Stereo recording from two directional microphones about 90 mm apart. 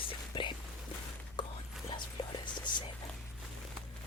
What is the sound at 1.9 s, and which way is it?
Whispering, 60° left (ahead or behind).